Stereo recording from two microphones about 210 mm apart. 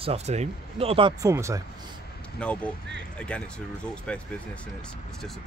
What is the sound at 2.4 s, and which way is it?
Speech, 5° left (ahead or behind).